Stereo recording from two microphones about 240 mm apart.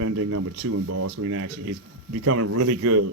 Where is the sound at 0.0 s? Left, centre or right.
Right.